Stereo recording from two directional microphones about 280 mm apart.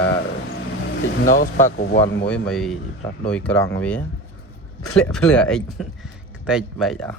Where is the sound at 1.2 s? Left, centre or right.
Left.